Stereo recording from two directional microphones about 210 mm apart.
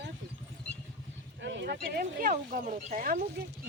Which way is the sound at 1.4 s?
55° right (ahead or behind).